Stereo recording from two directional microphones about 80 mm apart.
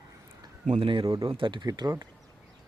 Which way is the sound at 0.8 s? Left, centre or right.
Right.